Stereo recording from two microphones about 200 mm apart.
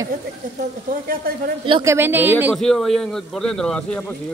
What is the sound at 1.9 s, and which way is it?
A woman's voice, 10° right (ahead or behind).